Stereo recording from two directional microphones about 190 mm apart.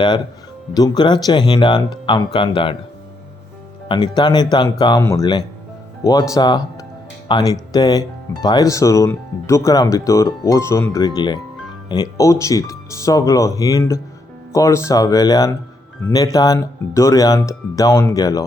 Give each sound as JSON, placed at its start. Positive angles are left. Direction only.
{"t": 0.7, "sound": "speech", "side_deg": 20}
{"t": 3.8, "sound": "speech", "side_deg": 25}